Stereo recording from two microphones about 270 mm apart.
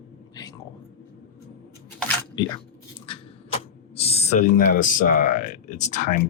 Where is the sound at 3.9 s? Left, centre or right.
Left.